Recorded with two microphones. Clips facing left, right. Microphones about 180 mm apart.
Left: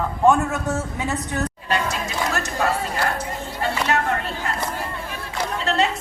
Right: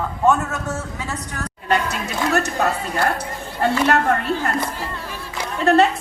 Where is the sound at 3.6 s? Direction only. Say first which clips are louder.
Right 5 dB; 55° right (ahead or behind).